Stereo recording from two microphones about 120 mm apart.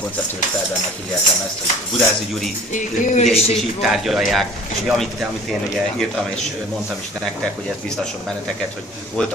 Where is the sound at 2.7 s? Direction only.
90° left.